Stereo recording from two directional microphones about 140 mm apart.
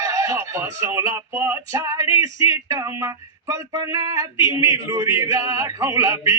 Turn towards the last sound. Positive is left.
turn(degrees=-20)  # may be behind; listen again after turning